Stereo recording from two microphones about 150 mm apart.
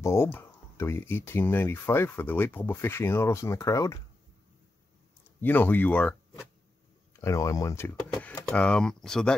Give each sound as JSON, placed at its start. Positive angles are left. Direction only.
{"t": 0.0, "sound": "speech", "side_deg": 15}
{"t": 5.4, "sound": "speech", "side_deg": 10}
{"t": 7.2, "sound": "speech", "side_deg": 20}